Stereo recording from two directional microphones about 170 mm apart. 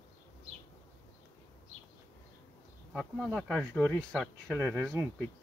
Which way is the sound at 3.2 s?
5° left (ahead or behind).